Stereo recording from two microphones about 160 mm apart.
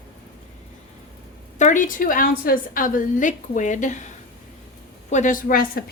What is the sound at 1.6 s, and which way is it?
A woman's voice, 50° left (ahead or behind).